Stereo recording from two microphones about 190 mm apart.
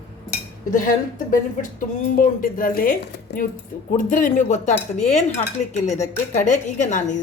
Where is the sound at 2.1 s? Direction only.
45° left (ahead or behind).